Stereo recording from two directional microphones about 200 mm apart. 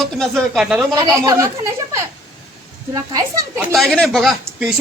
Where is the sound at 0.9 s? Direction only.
15° right (ahead or behind).